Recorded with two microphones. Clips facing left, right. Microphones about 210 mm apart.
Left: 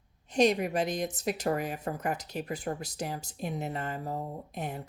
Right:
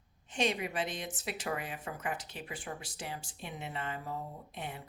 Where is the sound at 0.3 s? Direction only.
40° left (ahead or behind).